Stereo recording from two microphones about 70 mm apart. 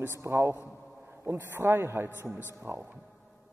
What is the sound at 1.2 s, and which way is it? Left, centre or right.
A man's voice, right.